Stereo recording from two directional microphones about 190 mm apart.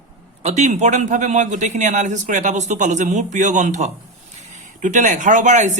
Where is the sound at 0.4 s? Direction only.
40° right (ahead or behind).